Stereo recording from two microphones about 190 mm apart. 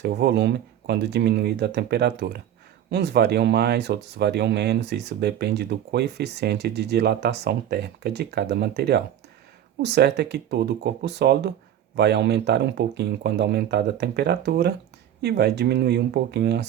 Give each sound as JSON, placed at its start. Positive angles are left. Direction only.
{"t": 0.0, "sound": "speech", "side_deg": -60}